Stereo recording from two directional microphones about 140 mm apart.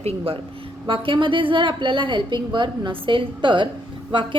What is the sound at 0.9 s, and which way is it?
A woman's voice, 35° right (ahead or behind).